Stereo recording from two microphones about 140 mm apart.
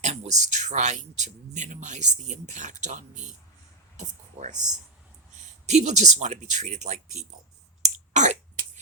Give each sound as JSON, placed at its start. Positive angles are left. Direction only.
{"t": 0.0, "sound": "speech", "side_deg": -55}
{"t": 5.6, "sound": "speech", "side_deg": -55}
{"t": 7.8, "sound": "throat clearing", "side_deg": -60}